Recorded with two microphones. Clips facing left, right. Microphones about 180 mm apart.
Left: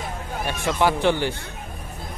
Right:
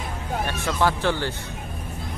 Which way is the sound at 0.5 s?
15° left (ahead or behind).